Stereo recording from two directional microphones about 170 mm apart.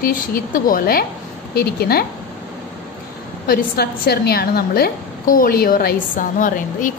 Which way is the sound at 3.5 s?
65° left (ahead or behind).